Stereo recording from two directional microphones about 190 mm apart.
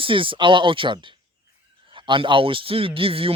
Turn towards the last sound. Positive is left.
turn(degrees=-30)  # may be behind; listen again after turning